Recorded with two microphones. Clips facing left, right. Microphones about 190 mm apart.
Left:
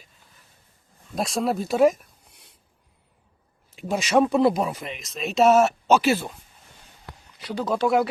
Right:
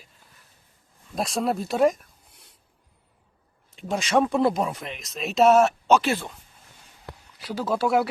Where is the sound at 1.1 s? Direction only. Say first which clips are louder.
Left 1 dB; centre (ahead or behind).